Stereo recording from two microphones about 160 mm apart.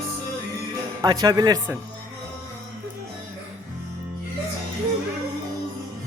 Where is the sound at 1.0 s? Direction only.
25° right (ahead or behind).